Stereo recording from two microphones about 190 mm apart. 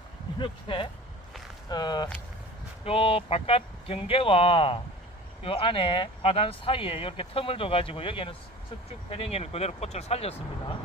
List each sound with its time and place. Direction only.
0.4 s speech: 25° left (ahead or behind)